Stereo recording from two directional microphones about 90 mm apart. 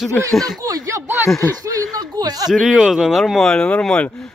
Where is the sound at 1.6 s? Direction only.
50° right (ahead or behind).